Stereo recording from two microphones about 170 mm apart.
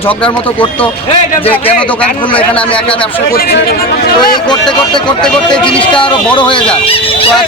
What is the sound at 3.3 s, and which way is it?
Speech, 65° left (ahead or behind).